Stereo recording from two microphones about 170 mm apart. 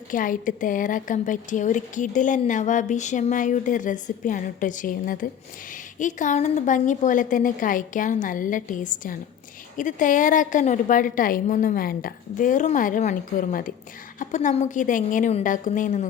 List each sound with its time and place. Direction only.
0.1 s a woman's voice: 50° left (ahead or behind)